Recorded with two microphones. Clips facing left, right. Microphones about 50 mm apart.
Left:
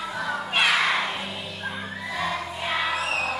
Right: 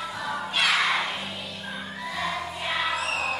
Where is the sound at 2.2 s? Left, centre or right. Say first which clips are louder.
Left 2 dB; centre.